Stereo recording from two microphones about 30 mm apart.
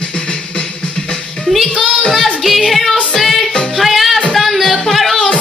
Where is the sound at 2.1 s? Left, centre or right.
Centre.